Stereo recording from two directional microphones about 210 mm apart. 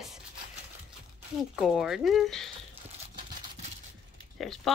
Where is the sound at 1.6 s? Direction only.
Centre (ahead or behind).